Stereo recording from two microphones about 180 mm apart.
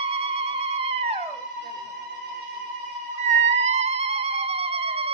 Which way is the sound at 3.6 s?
35° right (ahead or behind).